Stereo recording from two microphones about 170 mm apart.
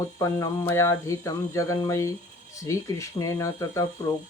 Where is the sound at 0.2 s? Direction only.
20° left (ahead or behind).